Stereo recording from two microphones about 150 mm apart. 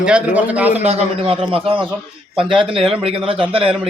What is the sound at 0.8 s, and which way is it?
A man's voice, 45° right (ahead or behind).